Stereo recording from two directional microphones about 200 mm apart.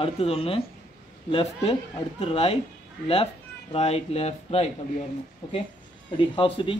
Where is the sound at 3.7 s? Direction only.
30° left (ahead or behind).